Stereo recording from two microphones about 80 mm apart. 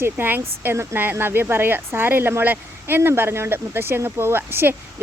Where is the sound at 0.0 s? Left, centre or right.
Right.